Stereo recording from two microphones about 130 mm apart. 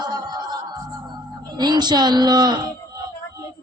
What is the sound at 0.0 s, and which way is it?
Music, 35° right (ahead or behind).